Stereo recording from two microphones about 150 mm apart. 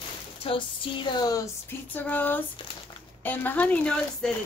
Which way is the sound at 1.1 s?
25° left (ahead or behind).